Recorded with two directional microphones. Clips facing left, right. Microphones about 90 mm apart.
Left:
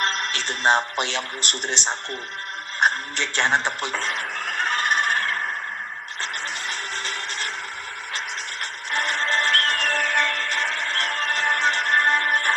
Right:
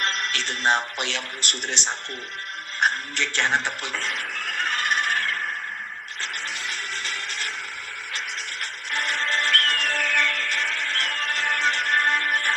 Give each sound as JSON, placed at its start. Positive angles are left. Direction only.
{"t": 0.0, "sound": "a man's voice", "side_deg": 25}
{"t": 2.8, "sound": "a sound", "side_deg": 25}
{"t": 6.6, "sound": "music", "side_deg": 30}
{"t": 8.9, "sound": "music", "side_deg": 25}